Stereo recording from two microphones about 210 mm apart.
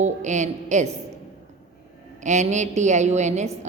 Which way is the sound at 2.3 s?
35° right (ahead or behind).